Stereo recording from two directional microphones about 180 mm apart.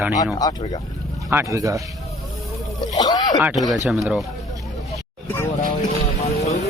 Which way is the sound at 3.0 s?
20° left (ahead or behind).